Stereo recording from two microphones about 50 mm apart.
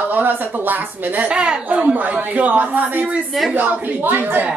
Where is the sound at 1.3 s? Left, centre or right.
Right.